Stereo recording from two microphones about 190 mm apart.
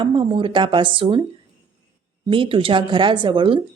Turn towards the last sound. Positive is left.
turn(degrees=-25)  # may be behind; listen again after turning